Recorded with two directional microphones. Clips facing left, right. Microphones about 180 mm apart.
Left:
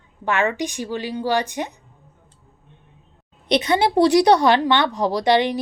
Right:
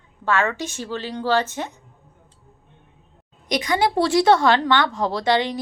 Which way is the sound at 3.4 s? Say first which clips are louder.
Left 3 dB; 25° left (ahead or behind).